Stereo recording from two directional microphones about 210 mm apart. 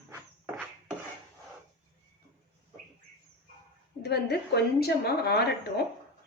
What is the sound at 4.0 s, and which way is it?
Speech, 50° left (ahead or behind).